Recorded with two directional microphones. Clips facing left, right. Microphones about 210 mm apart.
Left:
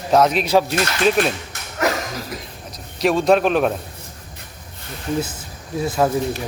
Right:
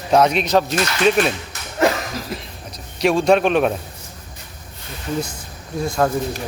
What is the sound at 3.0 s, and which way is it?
Speech, centre (ahead or behind).